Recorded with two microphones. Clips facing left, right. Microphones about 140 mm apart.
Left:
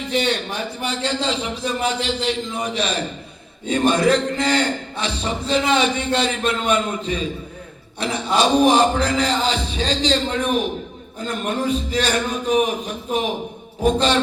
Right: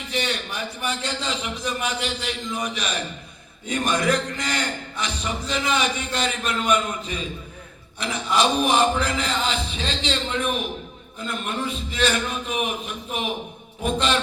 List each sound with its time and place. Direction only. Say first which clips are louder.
0.1 s a man's voice: left 6 dB; 35° left (ahead or behind)
7.9 s a man's voice: left 3 dB; 35° left (ahead or behind)